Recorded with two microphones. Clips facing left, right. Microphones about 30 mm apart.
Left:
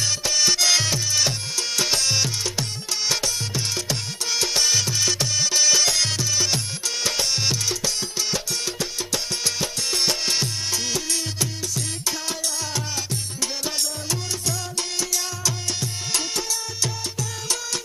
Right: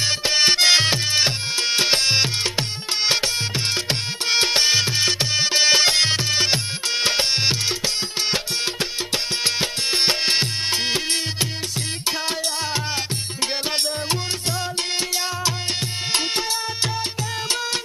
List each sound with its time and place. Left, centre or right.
0.0 s music: right
13.4 s music: right